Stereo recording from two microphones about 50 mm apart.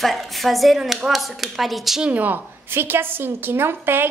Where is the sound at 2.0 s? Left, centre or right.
Right.